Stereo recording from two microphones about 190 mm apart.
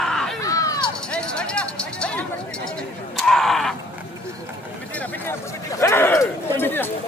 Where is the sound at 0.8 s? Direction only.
5° left (ahead or behind).